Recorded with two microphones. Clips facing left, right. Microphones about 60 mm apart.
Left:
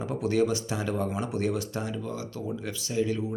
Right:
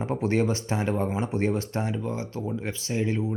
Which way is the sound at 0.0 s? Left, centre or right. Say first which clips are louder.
Right 1 dB; right.